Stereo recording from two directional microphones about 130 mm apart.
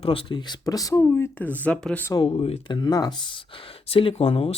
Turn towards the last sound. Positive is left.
turn(degrees=50)  # may be behind; listen again after turning